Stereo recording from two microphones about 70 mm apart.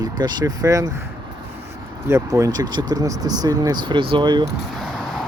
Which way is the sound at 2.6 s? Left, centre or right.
Right.